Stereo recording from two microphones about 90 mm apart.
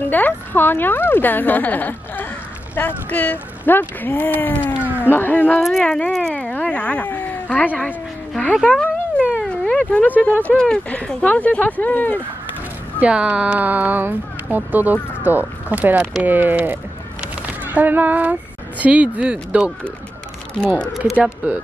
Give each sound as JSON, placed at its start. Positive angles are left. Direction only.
{"t": 0.1, "sound": "a woman's voice", "side_deg": 20}
{"t": 5.6, "sound": "speech", "side_deg": 0}
{"t": 5.9, "sound": "speech", "side_deg": 15}
{"t": 6.5, "sound": "a sound", "side_deg": 15}
{"t": 10.4, "sound": "speech", "side_deg": 10}
{"t": 13.0, "sound": "speech", "side_deg": -15}
{"t": 17.2, "sound": "horse", "side_deg": -15}
{"t": 18.8, "sound": "speech", "side_deg": -15}
{"t": 20.6, "sound": "speech", "side_deg": 10}